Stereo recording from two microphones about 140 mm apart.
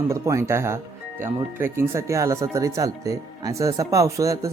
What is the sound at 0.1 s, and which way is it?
Speech, 20° right (ahead or behind).